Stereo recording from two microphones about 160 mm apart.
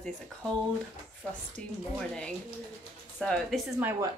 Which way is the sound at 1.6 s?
5° left (ahead or behind).